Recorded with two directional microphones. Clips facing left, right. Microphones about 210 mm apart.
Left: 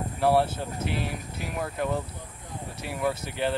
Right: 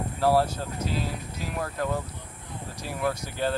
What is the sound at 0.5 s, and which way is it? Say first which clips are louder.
Speech: even; 25° left (ahead or behind).